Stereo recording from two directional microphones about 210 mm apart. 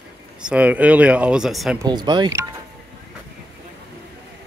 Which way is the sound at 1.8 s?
20° right (ahead or behind).